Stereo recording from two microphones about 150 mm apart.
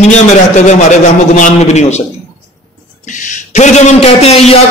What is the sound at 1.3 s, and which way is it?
Speech, 55° left (ahead or behind).